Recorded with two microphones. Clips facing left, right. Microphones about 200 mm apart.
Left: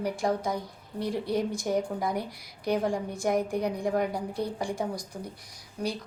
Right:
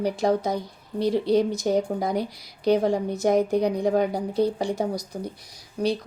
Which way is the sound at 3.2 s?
90° right.